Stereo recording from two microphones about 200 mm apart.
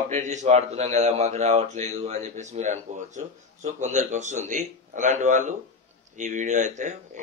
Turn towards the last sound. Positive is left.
turn(degrees=-40)  # may be behind; listen again after turning